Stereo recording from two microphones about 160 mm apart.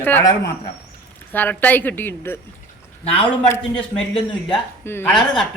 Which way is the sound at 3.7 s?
30° left (ahead or behind).